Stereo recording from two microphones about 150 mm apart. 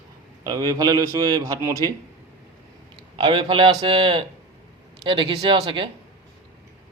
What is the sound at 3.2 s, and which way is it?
Speech, 35° right (ahead or behind).